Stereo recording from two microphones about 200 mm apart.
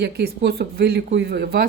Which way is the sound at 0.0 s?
55° right (ahead or behind).